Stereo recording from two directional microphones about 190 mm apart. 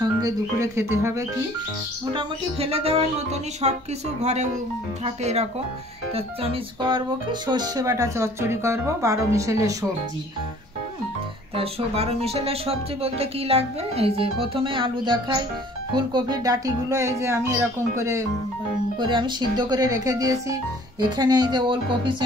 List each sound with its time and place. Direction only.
0.0 s music: 15° right (ahead or behind)
2.1 s speech: 30° right (ahead or behind)
11.5 s speech: 30° right (ahead or behind)